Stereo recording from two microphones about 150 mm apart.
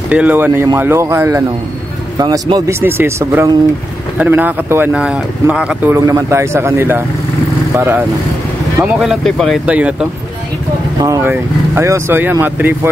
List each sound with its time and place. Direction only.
0.1 s speech: 10° right (ahead or behind)
9.0 s speech: centre (ahead or behind)
11.0 s speech: 20° right (ahead or behind)